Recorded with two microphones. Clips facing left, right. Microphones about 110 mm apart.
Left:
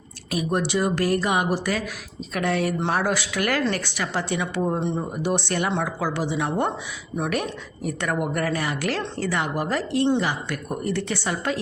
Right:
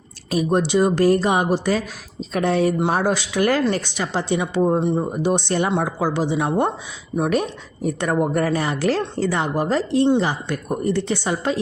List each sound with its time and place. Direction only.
0.3 s a woman's voice: 30° right (ahead or behind)